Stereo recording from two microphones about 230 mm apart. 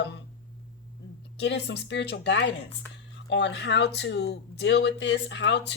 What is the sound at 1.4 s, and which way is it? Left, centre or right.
Speech, left.